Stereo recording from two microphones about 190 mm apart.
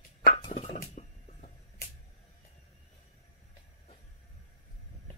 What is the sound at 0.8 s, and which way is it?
Arrow, 40° left (ahead or behind).